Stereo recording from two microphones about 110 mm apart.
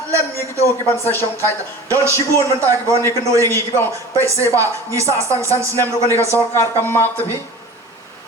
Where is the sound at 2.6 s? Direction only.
20° left (ahead or behind).